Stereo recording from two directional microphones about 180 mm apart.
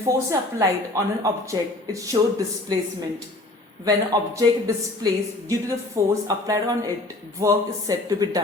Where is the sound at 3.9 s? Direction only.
20° right (ahead or behind).